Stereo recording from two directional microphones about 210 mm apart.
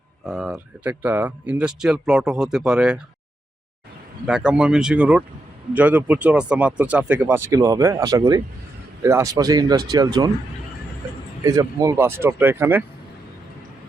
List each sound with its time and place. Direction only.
0.3 s speech: 5° right (ahead or behind)
4.3 s speech: 5° right (ahead or behind)
11.4 s speech: 15° right (ahead or behind)